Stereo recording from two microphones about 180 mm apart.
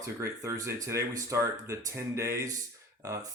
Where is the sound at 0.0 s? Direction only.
20° right (ahead or behind).